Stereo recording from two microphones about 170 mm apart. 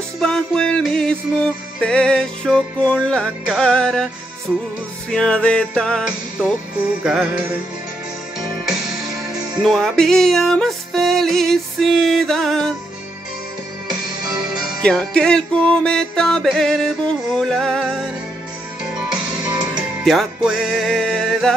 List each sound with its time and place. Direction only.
0.2 s music: 5° left (ahead or behind)
5.1 s music: 5° left (ahead or behind)
9.6 s music: centre (ahead or behind)
13.8 s music: 25° right (ahead or behind)
14.8 s music: 5° left (ahead or behind)
20.1 s music: centre (ahead or behind)